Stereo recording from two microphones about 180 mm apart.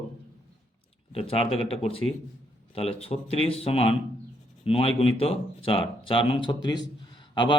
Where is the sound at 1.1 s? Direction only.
30° left (ahead or behind).